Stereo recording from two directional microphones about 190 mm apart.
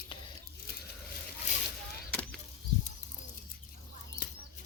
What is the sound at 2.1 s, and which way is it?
Chop, 5° left (ahead or behind).